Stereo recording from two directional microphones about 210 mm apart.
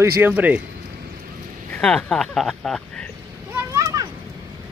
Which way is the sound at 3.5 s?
15° right (ahead or behind).